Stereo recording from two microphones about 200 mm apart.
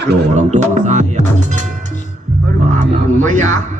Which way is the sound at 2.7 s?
35° right (ahead or behind).